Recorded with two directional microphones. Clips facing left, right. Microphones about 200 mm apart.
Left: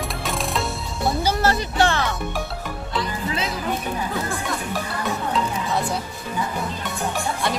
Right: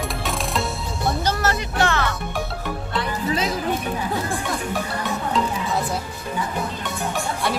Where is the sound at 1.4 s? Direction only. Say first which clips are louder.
Left 2 dB; 30° left (ahead or behind).